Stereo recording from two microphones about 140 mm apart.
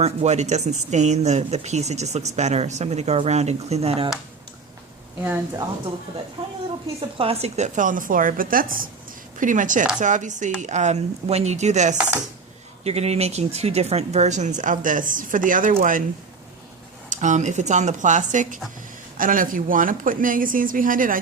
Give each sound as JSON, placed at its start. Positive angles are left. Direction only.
{"t": 0.0, "sound": "speech", "side_deg": -50}
{"t": 6.4, "sound": "a woman's voice", "side_deg": -40}
{"t": 9.4, "sound": "speech", "side_deg": -70}
{"t": 17.1, "sound": "speech", "side_deg": -60}
{"t": 19.1, "sound": "speech", "side_deg": -80}